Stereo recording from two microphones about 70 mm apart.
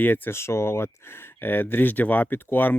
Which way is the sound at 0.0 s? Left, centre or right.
Left.